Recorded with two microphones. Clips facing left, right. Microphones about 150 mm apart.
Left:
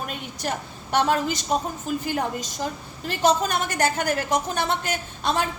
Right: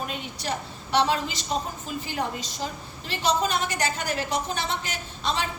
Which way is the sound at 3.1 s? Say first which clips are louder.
Left 3 dB; 45° left (ahead or behind).